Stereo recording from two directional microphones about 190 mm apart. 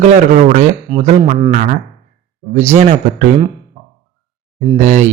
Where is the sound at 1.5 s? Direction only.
45° right (ahead or behind).